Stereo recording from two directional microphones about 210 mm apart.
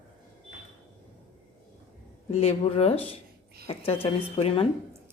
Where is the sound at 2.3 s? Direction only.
30° left (ahead or behind).